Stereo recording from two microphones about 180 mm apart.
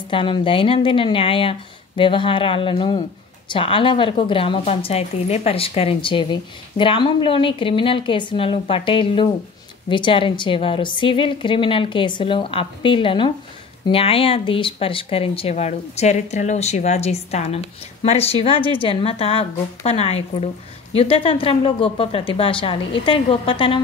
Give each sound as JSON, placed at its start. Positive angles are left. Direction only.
{"t": 0.1, "sound": "a woman's voice", "side_deg": 25}